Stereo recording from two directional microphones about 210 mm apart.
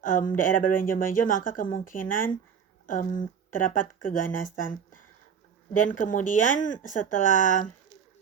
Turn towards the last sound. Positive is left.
turn(degrees=40)  # may be behind; listen again after turning